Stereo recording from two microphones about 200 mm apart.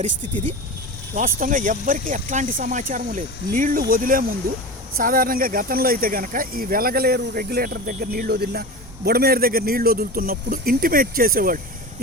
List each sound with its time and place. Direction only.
1.1 s speech: 45° right (ahead or behind)